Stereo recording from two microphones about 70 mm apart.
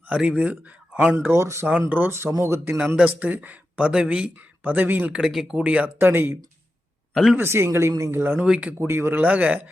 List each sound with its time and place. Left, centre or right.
0.2 s speech: centre
1.2 s a woman's voice: right
2.7 s speech: centre
5.1 s speech: centre
5.5 s speech: centre
6.0 s a woman's voice: right
7.1 s speech: centre
7.3 s a woman's voice: right
8.2 s speech: right
8.4 s speech: centre
8.8 s speech: right